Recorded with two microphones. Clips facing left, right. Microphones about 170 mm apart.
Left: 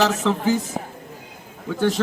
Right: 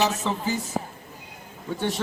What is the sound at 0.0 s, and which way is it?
Speech, 80° left.